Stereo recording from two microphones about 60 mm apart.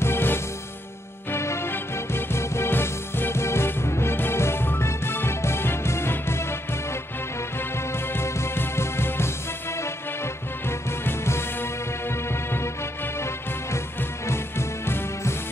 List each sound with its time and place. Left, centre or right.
0.0 s music: left